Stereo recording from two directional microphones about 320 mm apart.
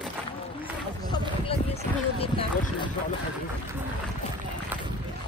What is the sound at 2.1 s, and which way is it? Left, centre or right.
Speech, centre.